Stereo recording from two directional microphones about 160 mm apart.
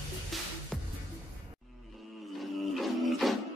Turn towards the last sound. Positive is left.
turn(degrees=0)  # may be behind; listen again after turning